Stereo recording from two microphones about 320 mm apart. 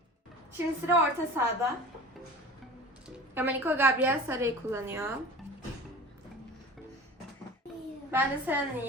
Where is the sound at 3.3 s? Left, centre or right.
Centre.